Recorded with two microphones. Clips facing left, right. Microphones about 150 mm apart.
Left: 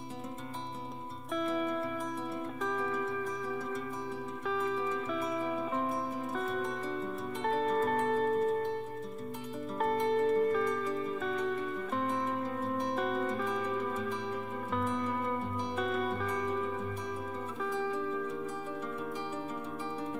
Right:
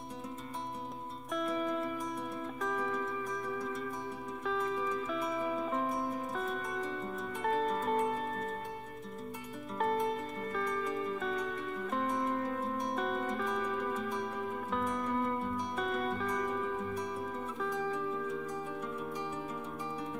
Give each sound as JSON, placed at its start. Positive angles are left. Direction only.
{"t": 1.3, "sound": "music", "side_deg": 0}
{"t": 4.5, "sound": "music", "side_deg": 0}
{"t": 9.8, "sound": "music", "side_deg": 0}
{"t": 11.9, "sound": "music", "side_deg": 0}